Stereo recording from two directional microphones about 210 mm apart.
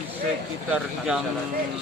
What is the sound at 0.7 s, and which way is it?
Speech, 5° right (ahead or behind).